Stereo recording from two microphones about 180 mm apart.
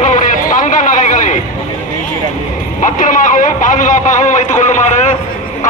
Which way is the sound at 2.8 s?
45° left (ahead or behind).